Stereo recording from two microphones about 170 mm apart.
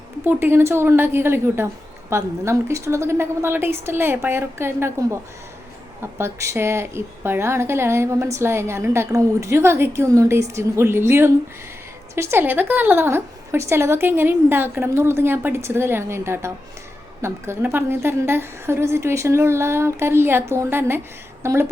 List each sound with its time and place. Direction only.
0.3 s a woman's voice: 15° right (ahead or behind)